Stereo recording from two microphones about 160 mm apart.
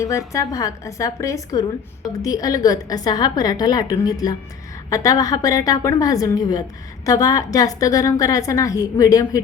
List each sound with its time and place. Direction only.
0.0 s a woman's voice: 20° left (ahead or behind)